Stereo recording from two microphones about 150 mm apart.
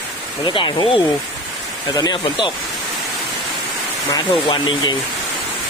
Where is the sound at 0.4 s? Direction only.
30° left (ahead or behind).